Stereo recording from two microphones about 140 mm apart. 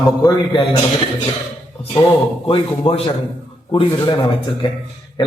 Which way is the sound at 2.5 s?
40° left (ahead or behind).